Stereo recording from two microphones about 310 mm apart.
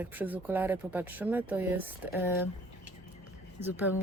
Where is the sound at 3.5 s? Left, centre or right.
Centre.